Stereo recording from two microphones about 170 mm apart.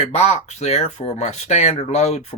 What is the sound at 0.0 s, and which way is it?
Speech, 40° left (ahead or behind).